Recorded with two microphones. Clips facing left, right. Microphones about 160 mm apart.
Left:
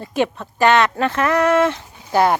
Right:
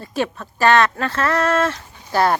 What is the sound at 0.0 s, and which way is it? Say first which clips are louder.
Speech: left 3 dB; 20° left (ahead or behind).